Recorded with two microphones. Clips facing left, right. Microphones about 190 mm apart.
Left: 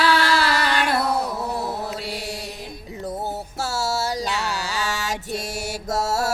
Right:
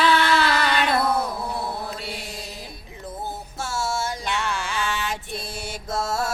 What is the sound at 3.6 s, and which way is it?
Music, 40° left (ahead or behind).